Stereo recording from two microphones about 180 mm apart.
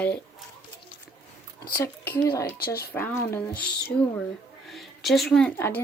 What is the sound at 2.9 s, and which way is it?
Speech, 10° left (ahead or behind).